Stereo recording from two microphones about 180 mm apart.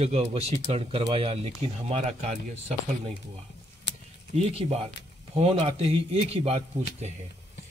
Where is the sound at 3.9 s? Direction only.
80° left.